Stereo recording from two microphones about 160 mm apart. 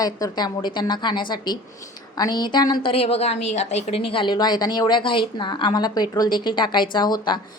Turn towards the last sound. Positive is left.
turn(degrees=25)  # may be behind; listen again after turning